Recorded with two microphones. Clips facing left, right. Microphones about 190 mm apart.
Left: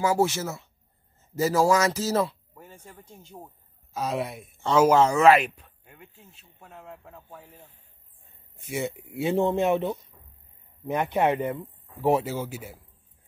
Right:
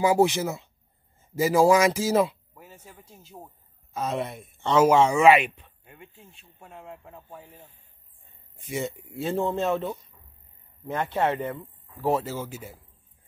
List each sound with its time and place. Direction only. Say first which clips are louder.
0.0 s speech: right 3 dB; 15° right (ahead or behind)
8.5 s speech: even; centre (ahead or behind)
8.8 s speech: left 6 dB; 15° left (ahead or behind)